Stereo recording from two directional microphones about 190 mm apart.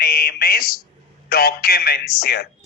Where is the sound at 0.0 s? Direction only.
55° left (ahead or behind).